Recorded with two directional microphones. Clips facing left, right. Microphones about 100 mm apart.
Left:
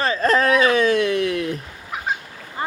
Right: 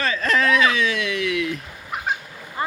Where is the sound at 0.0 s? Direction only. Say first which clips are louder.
Left 3 dB; 35° left (ahead or behind).